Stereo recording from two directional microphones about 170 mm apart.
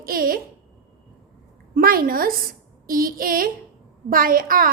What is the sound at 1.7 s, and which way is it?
A woman's voice, 60° right (ahead or behind).